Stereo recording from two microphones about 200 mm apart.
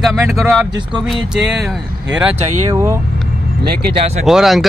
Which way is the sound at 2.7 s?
15° right (ahead or behind).